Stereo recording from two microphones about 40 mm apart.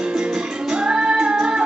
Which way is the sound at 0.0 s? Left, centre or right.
Centre.